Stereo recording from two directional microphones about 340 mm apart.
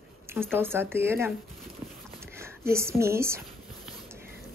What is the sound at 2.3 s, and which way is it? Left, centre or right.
Speech, centre.